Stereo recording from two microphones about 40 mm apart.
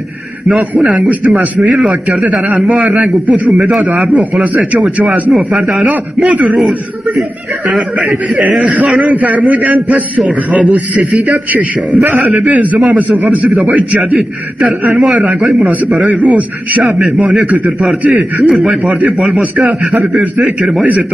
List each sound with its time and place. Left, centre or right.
0.5 s a man's voice: right
8.0 s a man's voice: right
14.1 s a man's voice: right
15.6 s a man's voice: right
20.3 s a man's voice: centre